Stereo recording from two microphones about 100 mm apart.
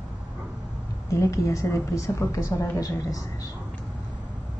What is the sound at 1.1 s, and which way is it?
A woman's voice, 30° left (ahead or behind).